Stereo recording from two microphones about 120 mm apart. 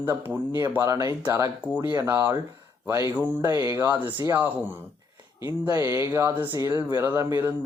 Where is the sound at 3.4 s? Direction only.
25° right (ahead or behind).